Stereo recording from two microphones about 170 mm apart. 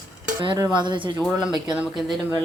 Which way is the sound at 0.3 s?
25° right (ahead or behind).